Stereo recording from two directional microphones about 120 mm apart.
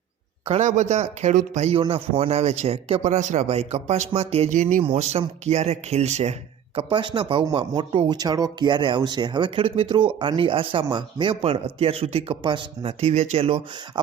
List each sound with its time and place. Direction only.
0.4 s speech: 80° right
1.7 s a man's voice: 50° right (ahead or behind); by 4.8 s 90° right
4.8 s a man's voice: 60° right (ahead or behind)
6.7 s speech: 45° right (ahead or behind)